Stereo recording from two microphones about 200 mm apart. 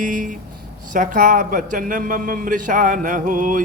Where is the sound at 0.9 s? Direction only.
40° right (ahead or behind).